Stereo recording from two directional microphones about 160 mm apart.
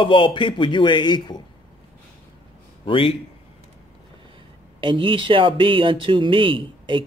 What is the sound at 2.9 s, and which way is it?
Speech, 35° left (ahead or behind).